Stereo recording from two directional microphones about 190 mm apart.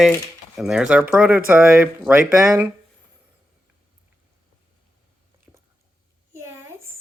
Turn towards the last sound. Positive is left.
turn(degrees=-10)  # may be behind; listen again after turning